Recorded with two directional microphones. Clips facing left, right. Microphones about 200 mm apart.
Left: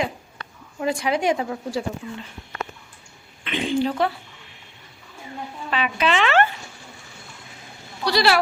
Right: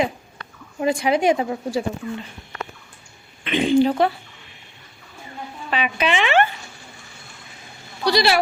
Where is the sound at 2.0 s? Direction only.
55° right (ahead or behind).